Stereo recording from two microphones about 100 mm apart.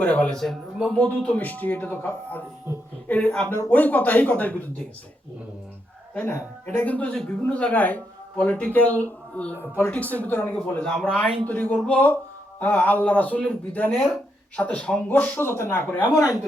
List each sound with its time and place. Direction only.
0.0 s speech: 15° left (ahead or behind)
2.7 s a sound: 30° right (ahead or behind)
3.1 s speech: 10° left (ahead or behind)
6.1 s speech: 20° left (ahead or behind)
9.6 s speech: 25° left (ahead or behind)
9.9 s speech: 15° left (ahead or behind)